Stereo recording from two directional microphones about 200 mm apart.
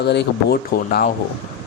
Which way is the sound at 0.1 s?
55° left (ahead or behind).